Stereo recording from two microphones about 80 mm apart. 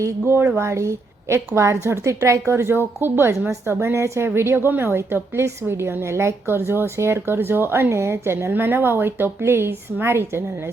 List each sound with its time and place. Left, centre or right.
0.0 s a woman's voice: right